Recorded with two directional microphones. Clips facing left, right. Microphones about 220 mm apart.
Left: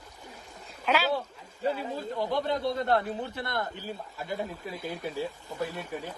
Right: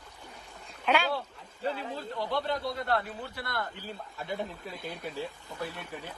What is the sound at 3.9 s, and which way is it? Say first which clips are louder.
Speech: left 2 dB; centre (ahead or behind).